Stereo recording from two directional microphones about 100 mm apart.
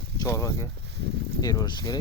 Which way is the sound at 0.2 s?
35° left (ahead or behind).